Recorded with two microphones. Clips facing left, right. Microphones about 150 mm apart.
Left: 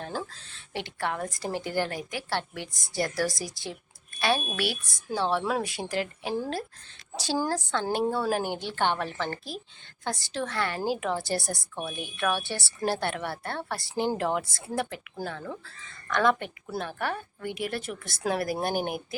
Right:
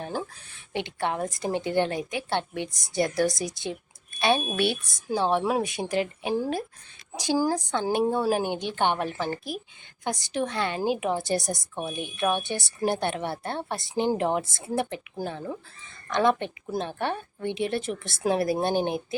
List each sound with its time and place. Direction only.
0.0 s a woman's voice: 15° right (ahead or behind)